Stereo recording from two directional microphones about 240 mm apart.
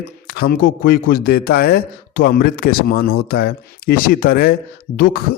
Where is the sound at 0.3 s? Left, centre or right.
Left.